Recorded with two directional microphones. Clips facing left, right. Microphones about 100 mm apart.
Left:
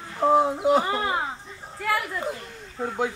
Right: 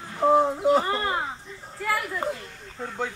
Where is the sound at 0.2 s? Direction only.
5° left (ahead or behind).